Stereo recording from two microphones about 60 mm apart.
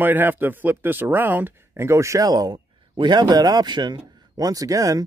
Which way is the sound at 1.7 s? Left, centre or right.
Right.